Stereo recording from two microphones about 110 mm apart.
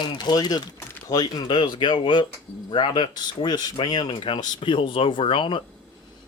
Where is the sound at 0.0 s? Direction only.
40° left (ahead or behind).